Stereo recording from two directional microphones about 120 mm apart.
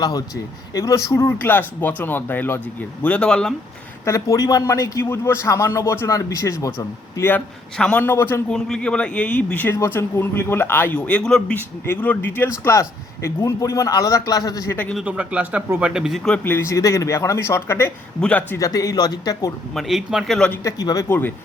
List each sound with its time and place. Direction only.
0.0 s speech: 35° left (ahead or behind); by 3.5 s 5° left (ahead or behind)
4.0 s a man's voice: 25° left (ahead or behind)
7.8 s speech: 5° left (ahead or behind)
8.0 s a man's voice: 20° left (ahead or behind)
8.4 s a man's voice: 5° left (ahead or behind); by 14.7 s 30° left (ahead or behind)
14.7 s speech: 15° left (ahead or behind)
14.9 s a man's voice: 10° right (ahead or behind)
16.4 s a man's voice: 20° left (ahead or behind)
18.5 s speech: 30° left (ahead or behind)
19.7 s a man's voice: 5° right (ahead or behind)
20.7 s a man's voice: 30° left (ahead or behind)